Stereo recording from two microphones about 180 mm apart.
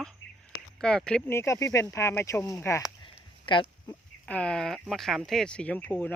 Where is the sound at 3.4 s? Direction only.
25° left (ahead or behind).